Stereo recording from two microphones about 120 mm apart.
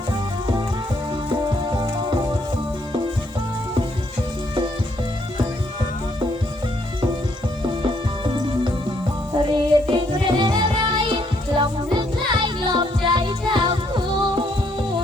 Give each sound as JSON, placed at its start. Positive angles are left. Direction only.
{"t": 1.7, "sound": "music", "side_deg": -40}
{"t": 7.6, "sound": "music", "side_deg": -45}